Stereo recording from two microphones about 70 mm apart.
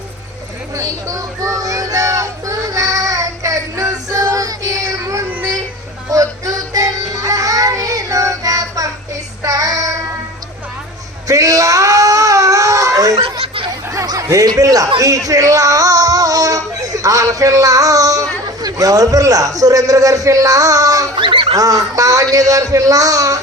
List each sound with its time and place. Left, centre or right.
0.8 s a sound: right
6.1 s music: right
9.4 s child singing: right
11.3 s wail: right
21.5 s a man's voice: right